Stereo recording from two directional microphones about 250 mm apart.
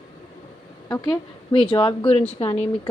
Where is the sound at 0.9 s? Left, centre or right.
Centre.